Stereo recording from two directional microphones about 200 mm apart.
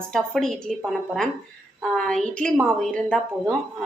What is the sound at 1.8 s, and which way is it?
A woman's voice, 5° left (ahead or behind).